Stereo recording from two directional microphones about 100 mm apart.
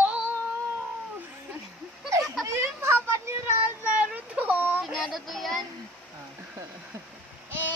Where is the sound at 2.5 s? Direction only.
25° right (ahead or behind).